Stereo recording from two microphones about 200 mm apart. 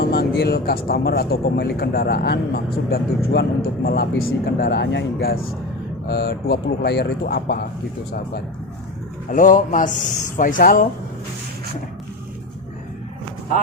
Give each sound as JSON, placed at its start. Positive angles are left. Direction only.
{"t": 0.0, "sound": "speech", "side_deg": 50}
{"t": 9.3, "sound": "speech", "side_deg": 40}